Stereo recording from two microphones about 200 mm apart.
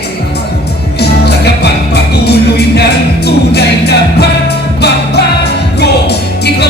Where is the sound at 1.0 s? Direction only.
55° left (ahead or behind).